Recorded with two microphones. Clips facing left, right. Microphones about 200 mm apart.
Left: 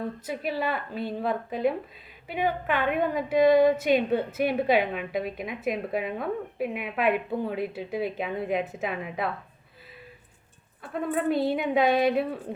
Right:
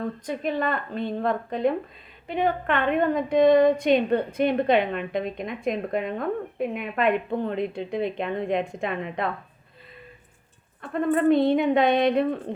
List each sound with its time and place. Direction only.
0.3 s a woman's voice: 5° left (ahead or behind)
10.8 s a woman's voice: 5° left (ahead or behind)